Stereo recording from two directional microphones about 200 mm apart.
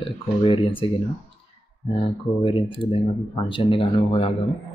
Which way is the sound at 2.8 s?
25° left (ahead or behind).